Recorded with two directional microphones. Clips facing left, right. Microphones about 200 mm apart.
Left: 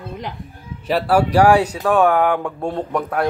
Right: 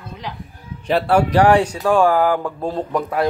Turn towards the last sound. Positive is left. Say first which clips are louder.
# right 1 dB
turn(degrees=-5)  # may be behind; listen again after turning